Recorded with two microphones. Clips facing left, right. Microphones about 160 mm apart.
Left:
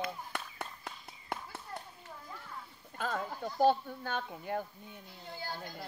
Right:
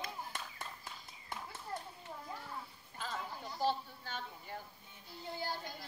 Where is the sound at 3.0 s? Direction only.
50° left (ahead or behind).